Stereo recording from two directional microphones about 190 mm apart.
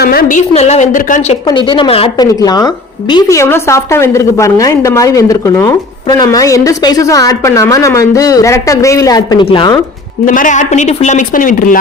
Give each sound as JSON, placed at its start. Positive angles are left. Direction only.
{"t": 0.0, "sound": "a woman's voice", "side_deg": 50}
{"t": 1.5, "sound": "a woman's voice", "side_deg": 25}
{"t": 10.2, "sound": "a woman's voice", "side_deg": 40}